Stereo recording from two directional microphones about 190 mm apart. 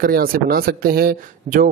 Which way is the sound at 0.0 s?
50° right (ahead or behind).